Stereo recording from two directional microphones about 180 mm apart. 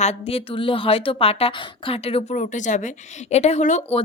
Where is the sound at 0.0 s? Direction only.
35° left (ahead or behind).